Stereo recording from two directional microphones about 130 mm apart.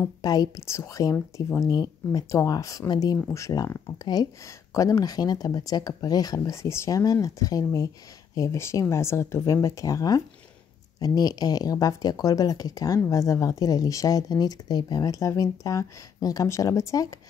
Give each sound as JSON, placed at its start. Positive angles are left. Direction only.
{"t": 0.2, "sound": "speech", "side_deg": 30}